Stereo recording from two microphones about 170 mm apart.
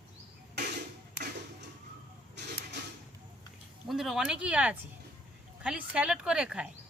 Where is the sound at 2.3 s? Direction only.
85° right.